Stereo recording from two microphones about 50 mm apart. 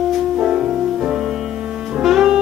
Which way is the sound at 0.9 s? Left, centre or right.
Centre.